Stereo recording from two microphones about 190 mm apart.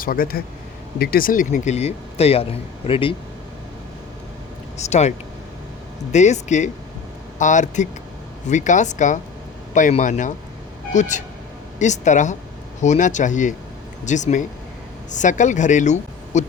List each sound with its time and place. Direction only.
0.0 s a man's voice: 50° left (ahead or behind); by 3.2 s 30° left (ahead or behind)
4.8 s a man's voice: 35° left (ahead or behind)